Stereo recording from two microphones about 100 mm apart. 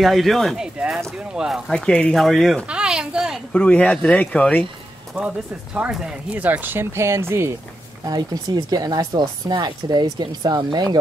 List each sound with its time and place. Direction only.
0.0 s speech: centre (ahead or behind)
1.7 s speech: 10° left (ahead or behind)
2.7 s a sound: 10° right (ahead or behind)
3.5 s speech: 15° left (ahead or behind)
5.8 s speech: 10° right (ahead or behind); by 7.5 s 25° right (ahead or behind)
8.0 s speech: 40° right (ahead or behind)